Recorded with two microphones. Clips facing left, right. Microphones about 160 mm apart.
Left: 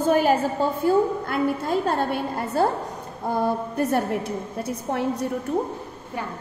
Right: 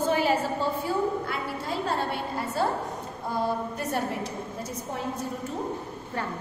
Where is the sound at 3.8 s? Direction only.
55° left (ahead or behind).